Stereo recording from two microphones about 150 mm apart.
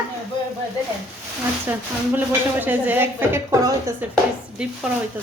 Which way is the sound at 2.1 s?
10° right (ahead or behind).